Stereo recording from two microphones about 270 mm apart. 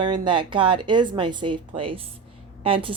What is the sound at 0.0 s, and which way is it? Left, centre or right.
A woman's voice, centre.